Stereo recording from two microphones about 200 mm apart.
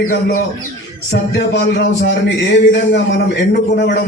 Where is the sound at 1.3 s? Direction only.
60° left (ahead or behind).